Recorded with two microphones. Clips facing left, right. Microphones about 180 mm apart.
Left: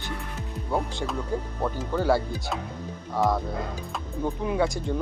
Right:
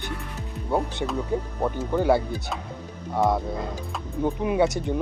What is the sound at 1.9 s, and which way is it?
Speech, 15° right (ahead or behind).